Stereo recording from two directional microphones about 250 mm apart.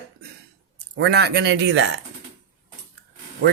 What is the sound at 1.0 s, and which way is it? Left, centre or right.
Speech, right.